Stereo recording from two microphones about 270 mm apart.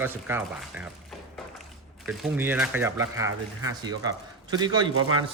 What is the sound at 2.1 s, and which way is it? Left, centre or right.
Speech, centre.